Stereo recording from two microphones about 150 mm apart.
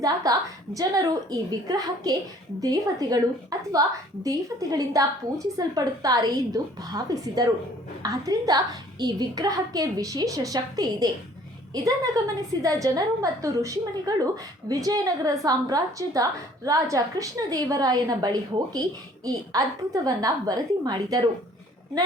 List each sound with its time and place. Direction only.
0.0 s a woman's voice: 25° right (ahead or behind)